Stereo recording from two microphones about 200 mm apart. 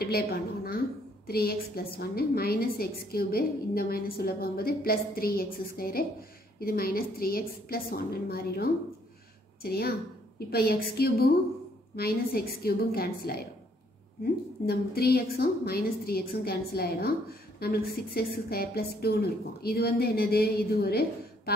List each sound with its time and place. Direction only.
0.0 s a woman's voice: 50° left (ahead or behind)
14.7 s a woman's voice: 50° left (ahead or behind)